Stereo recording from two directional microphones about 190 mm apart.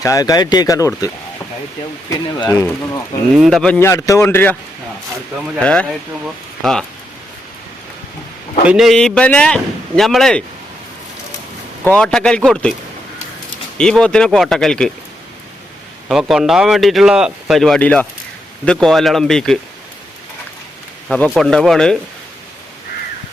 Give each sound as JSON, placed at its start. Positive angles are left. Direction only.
{"t": 0.0, "sound": "speech", "side_deg": 20}
{"t": 3.3, "sound": "speech", "side_deg": 0}
{"t": 3.8, "sound": "speech", "side_deg": 15}
{"t": 5.5, "sound": "speech", "side_deg": 5}
{"t": 8.6, "sound": "speech", "side_deg": 0}
{"t": 11.9, "sound": "speech", "side_deg": 5}
{"t": 13.7, "sound": "speech", "side_deg": 5}
{"t": 16.0, "sound": "speech", "side_deg": 0}
{"t": 21.2, "sound": "speech", "side_deg": 0}